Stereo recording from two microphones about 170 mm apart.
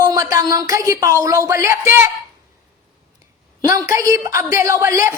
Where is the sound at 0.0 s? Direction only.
20° right (ahead or behind).